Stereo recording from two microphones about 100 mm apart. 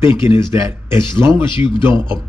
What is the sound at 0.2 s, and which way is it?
Speech, 25° right (ahead or behind).